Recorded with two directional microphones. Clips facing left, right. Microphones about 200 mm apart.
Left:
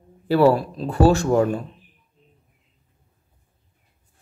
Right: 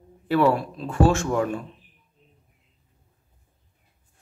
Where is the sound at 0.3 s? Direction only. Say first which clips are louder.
Left 4 dB; 35° left (ahead or behind).